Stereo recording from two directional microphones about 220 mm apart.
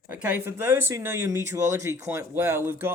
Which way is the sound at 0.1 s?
5° right (ahead or behind).